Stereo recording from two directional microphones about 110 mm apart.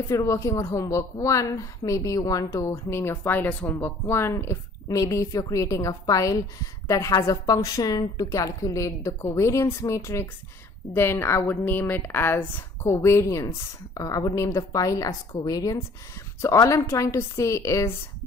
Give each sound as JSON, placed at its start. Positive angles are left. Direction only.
{"t": 0.1, "sound": "a woman's voice", "side_deg": 30}